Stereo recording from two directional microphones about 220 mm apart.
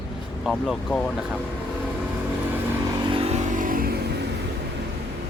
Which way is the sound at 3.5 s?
40° right (ahead or behind).